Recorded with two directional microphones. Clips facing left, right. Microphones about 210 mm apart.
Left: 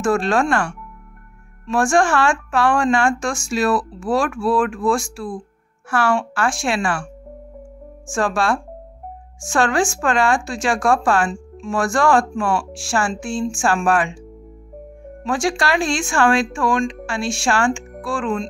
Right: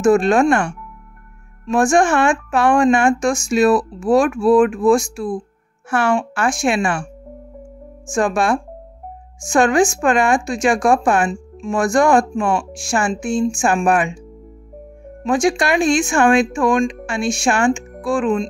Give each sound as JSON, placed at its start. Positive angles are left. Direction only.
{"t": 0.0, "sound": "speech", "side_deg": -15}
{"t": 8.1, "sound": "speech", "side_deg": -15}
{"t": 15.2, "sound": "speech", "side_deg": -20}